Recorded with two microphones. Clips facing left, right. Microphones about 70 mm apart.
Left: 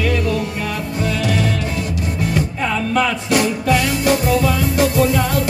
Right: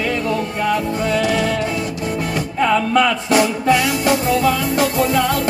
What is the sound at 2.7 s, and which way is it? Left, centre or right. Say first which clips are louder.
Music: right 3 dB; right.